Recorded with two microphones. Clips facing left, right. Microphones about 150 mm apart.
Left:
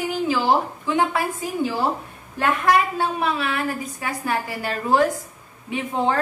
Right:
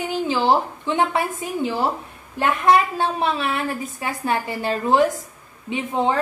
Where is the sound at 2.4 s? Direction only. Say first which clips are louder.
Right 2 dB; 25° right (ahead or behind).